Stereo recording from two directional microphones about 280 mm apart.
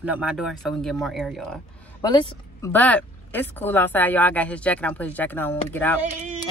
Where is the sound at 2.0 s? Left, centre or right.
Centre.